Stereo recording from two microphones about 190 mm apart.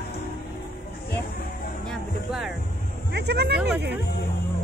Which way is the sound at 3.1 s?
60° right (ahead or behind).